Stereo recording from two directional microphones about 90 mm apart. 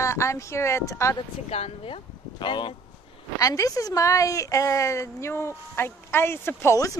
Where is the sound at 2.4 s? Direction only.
65° left (ahead or behind).